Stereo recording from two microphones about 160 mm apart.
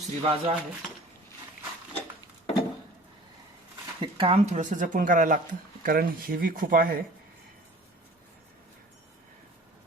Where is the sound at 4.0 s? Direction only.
35° right (ahead or behind); by 7.0 s 65° right (ahead or behind).